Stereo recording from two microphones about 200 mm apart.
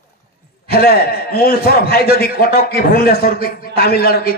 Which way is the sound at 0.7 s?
50° left (ahead or behind).